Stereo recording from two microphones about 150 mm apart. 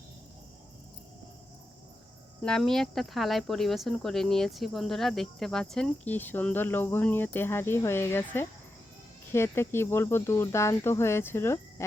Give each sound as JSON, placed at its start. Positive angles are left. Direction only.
{"t": 2.4, "sound": "speech", "side_deg": 5}